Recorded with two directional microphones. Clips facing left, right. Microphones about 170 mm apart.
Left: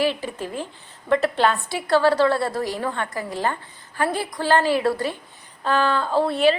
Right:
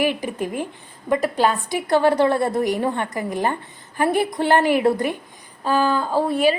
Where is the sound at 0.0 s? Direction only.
15° right (ahead or behind).